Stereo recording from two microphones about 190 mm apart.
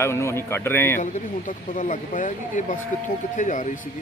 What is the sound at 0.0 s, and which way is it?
A man's voice, 15° left (ahead or behind).